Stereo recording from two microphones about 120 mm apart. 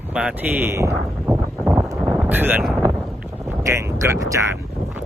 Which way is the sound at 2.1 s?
15° right (ahead or behind).